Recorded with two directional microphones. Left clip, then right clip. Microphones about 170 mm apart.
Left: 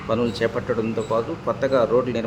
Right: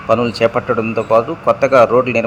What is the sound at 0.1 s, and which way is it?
A man's voice, 25° right (ahead or behind).